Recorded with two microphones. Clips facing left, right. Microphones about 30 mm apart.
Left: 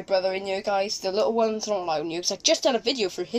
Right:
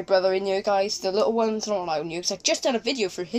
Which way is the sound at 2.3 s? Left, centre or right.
Centre.